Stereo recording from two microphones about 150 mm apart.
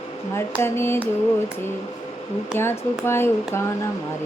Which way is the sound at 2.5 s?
15° left (ahead or behind).